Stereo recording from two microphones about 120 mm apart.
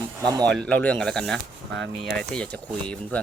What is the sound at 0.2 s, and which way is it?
Speech, 30° right (ahead or behind).